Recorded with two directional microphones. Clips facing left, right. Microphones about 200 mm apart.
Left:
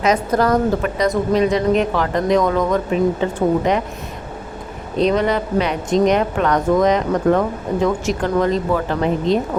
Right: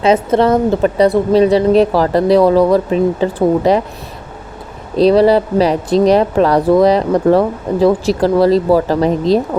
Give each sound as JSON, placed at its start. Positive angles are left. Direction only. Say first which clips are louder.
{"t": 0.0, "sound": "speech", "louder": "right 5 dB", "side_deg": -25}
{"t": 4.9, "sound": "speech", "louder": "right 8 dB", "side_deg": -35}